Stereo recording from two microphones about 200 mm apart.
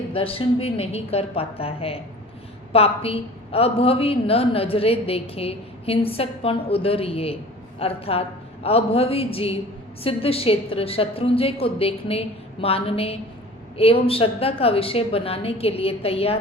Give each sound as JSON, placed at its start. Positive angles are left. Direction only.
{"t": 0.1, "sound": "a woman's voice", "side_deg": 25}